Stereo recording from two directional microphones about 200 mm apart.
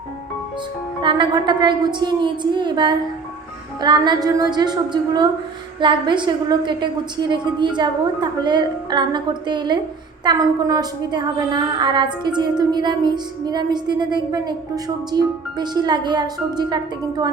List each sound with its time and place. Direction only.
1.0 s a woman's voice: 25° right (ahead or behind)